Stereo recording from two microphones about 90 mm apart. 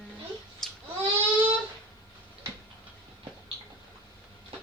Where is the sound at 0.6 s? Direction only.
5° left (ahead or behind).